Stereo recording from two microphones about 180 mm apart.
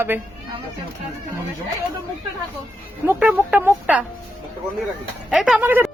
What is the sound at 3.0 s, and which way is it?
Speech, 10° right (ahead or behind).